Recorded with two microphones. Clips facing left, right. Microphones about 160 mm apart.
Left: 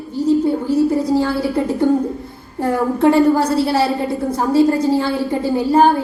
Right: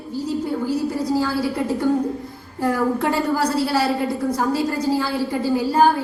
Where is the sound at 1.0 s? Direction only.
25° left (ahead or behind).